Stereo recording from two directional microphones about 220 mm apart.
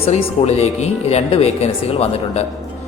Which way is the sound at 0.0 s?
30° left (ahead or behind).